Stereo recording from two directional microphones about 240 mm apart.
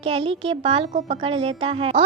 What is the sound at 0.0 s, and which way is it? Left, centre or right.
A woman's voice, right.